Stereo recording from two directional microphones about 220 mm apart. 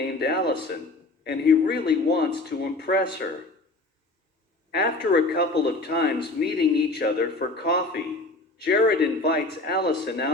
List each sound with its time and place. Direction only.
0.2 s speech: 45° left (ahead or behind)
4.7 s speech: 45° left (ahead or behind)